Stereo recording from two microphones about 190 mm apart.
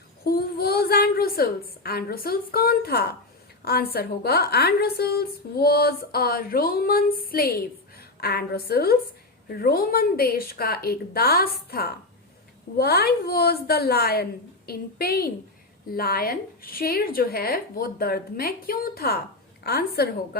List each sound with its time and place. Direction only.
0.3 s a woman's voice: 55° left (ahead or behind)